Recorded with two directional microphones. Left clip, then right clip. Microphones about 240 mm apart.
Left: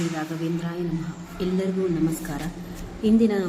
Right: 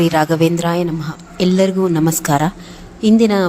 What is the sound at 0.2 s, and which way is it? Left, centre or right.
Speech, right.